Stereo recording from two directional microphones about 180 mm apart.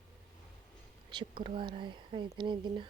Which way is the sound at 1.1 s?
25° right (ahead or behind).